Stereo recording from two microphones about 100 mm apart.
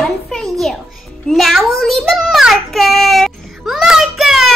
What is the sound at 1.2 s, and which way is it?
Child singing, centre (ahead or behind).